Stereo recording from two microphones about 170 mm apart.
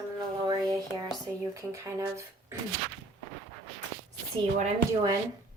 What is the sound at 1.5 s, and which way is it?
A woman's voice, 15° right (ahead or behind).